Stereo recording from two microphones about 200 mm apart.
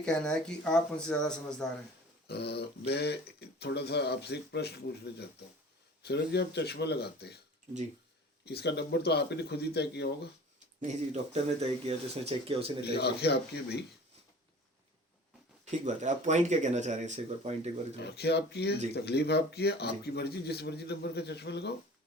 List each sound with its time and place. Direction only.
0.0 s speech: 5° left (ahead or behind)
2.2 s speech: 55° left (ahead or behind)
8.4 s speech: 55° left (ahead or behind)
10.8 s speech: 35° right (ahead or behind)
12.8 s speech: 55° left (ahead or behind)
15.8 s speech: 35° right (ahead or behind)
18.0 s speech: 55° left (ahead or behind)